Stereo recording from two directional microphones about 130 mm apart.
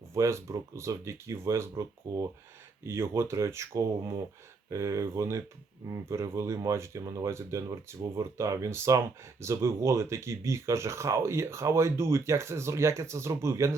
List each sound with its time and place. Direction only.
0.1 s speech: 20° right (ahead or behind)